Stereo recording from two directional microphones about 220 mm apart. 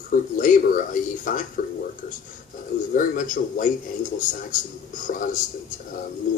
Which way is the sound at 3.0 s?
35° left (ahead or behind).